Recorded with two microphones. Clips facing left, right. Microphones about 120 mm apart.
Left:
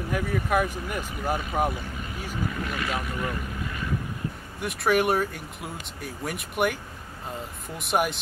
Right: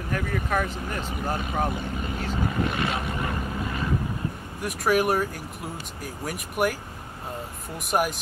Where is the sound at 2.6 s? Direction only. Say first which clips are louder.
Right 3 dB; 25° right (ahead or behind).